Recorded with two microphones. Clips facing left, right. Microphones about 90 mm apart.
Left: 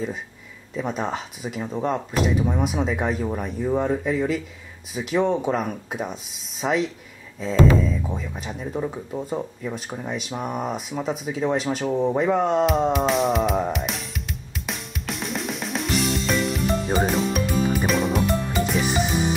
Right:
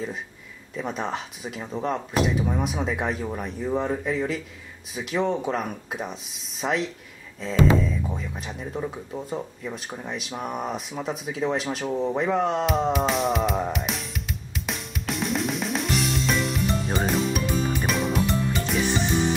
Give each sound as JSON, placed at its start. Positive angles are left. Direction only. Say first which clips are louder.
{"t": 0.7, "sound": "speech", "louder": "left 2 dB", "side_deg": 0}
{"t": 11.9, "sound": "music", "louder": "left 3 dB", "side_deg": 10}